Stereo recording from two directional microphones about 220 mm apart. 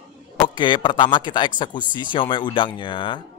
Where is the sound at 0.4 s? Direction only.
20° left (ahead or behind).